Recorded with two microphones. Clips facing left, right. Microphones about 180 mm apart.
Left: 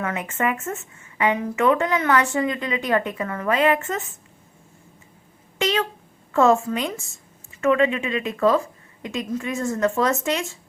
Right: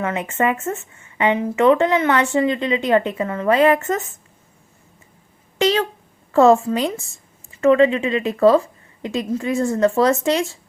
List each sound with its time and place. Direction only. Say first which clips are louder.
0.0 s speech: right 4 dB; 25° right (ahead or behind)
5.5 s a sound: right 5 dB; 35° right (ahead or behind)
6.3 s a woman's voice: right 5 dB; 35° right (ahead or behind)